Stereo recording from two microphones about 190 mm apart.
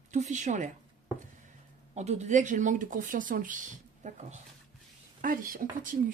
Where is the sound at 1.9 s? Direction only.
35° right (ahead or behind).